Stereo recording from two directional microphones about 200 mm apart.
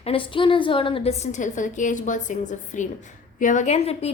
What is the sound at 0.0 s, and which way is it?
A woman's voice, 25° left (ahead or behind).